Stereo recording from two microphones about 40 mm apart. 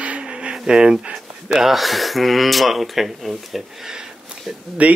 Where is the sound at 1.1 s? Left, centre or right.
Centre.